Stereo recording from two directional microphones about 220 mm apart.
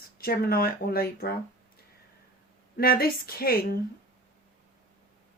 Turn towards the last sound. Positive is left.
turn(degrees=40)  # may be behind; listen again after turning